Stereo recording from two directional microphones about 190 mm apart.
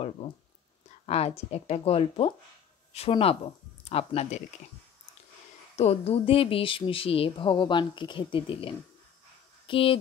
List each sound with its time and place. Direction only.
1.0 s speech: 35° left (ahead or behind)
5.8 s speech: 35° left (ahead or behind)